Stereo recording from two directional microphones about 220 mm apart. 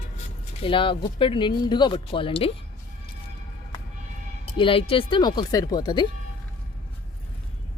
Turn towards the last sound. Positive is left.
turn(degrees=20)  # may be behind; listen again after turning